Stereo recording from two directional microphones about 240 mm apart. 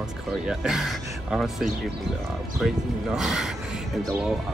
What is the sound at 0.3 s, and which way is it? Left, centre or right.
Speech, centre.